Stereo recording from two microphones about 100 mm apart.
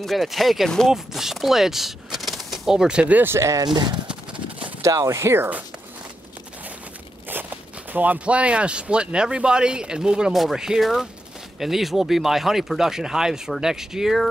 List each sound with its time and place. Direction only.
0.0 s speech: centre (ahead or behind); by 3.6 s 30° right (ahead or behind)
3.6 s speech: 45° right (ahead or behind)
4.1 s a sound: 10° right (ahead or behind)
4.8 s speech: 30° right (ahead or behind)
7.2 s speech: 20° right (ahead or behind); by 14.3 s centre (ahead or behind)